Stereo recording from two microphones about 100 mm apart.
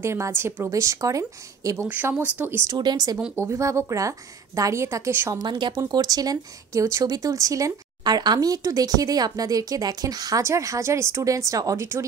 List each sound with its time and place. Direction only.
0.0 s speech: 25° right (ahead or behind)
1.9 s speech: 20° right (ahead or behind)
2.7 s speech: 45° right (ahead or behind)
3.3 s speech: 30° right (ahead or behind)
5.3 s speech: 45° right (ahead or behind); by 12.0 s 30° right (ahead or behind)